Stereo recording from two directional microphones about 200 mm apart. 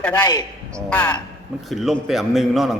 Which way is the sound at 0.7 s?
5° left (ahead or behind).